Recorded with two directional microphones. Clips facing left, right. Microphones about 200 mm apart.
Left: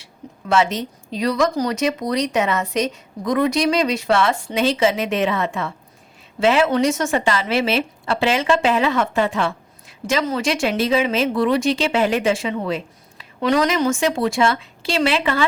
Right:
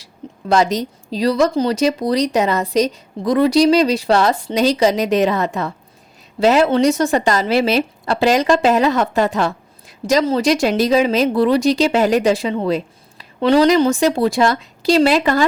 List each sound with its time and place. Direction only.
0.0 s a woman's voice: 35° right (ahead or behind)